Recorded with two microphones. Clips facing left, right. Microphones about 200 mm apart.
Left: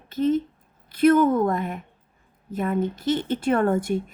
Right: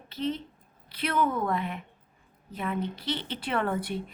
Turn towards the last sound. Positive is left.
turn(degrees=45)  # may be behind; listen again after turning